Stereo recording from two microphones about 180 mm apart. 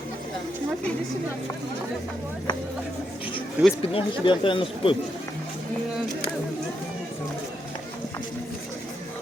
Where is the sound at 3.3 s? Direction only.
Centre (ahead or behind).